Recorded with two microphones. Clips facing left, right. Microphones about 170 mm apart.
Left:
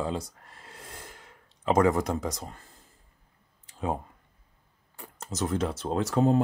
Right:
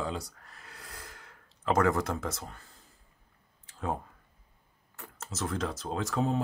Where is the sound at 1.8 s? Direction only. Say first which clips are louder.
Left 4 dB; 20° left (ahead or behind).